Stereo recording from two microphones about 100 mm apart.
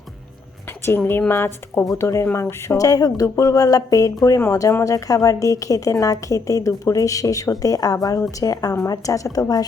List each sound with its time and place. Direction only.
0.9 s a woman's voice: 20° left (ahead or behind); by 9.6 s 40° left (ahead or behind)